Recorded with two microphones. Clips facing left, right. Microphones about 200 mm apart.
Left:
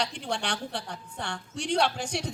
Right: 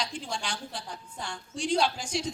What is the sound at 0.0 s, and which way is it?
A woman's voice, 65° left (ahead or behind).